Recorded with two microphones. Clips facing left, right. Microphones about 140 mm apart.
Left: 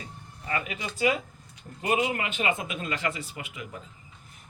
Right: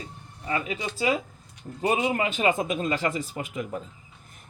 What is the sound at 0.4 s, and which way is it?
Speech, 25° right (ahead or behind).